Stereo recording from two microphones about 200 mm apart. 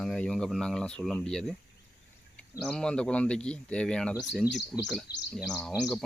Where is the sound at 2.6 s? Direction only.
5° left (ahead or behind).